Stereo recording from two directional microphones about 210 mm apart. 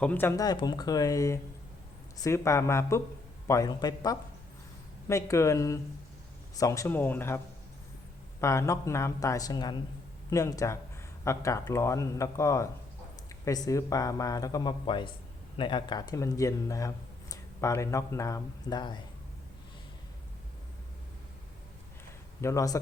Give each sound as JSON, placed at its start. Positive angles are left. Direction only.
{"t": 0.0, "sound": "speech", "side_deg": 10}
{"t": 22.4, "sound": "speech", "side_deg": 15}